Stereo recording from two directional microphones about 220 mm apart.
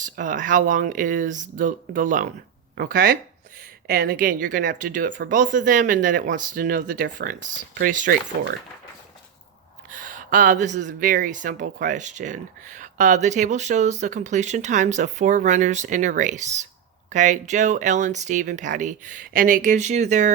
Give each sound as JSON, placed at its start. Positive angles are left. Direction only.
{"t": 0.0, "sound": "speech", "side_deg": -35}
{"t": 9.9, "sound": "speech", "side_deg": -35}